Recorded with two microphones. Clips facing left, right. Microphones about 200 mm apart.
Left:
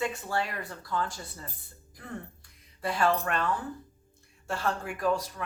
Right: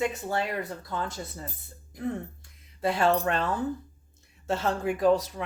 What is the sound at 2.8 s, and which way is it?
Speech, 25° right (ahead or behind).